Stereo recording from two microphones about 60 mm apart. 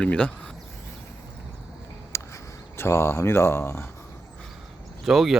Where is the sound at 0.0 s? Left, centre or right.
Centre.